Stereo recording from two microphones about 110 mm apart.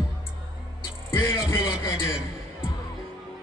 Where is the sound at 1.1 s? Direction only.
25° left (ahead or behind).